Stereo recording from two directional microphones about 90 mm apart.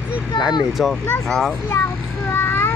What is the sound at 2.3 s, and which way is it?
Vehicle, 30° left (ahead or behind).